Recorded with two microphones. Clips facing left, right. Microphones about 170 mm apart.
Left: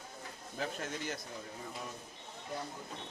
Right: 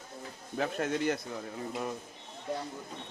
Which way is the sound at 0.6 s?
70° right (ahead or behind).